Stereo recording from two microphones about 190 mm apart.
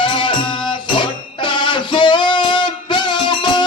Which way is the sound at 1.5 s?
25° left (ahead or behind).